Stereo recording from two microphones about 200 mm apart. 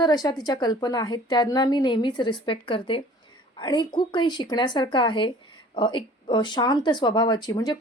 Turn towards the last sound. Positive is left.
turn(degrees=20)  # may be behind; listen again after turning